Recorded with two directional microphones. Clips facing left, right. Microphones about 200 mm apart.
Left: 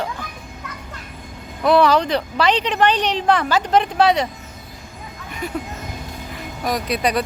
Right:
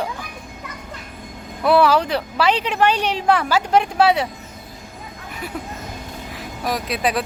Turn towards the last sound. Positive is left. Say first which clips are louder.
# left 1 dB
turn(degrees=0)  # may be behind; listen again after turning